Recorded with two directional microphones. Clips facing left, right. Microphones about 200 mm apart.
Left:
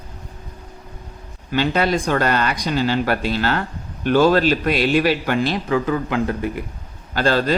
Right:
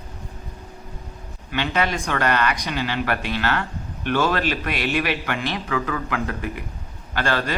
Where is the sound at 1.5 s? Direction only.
35° left (ahead or behind).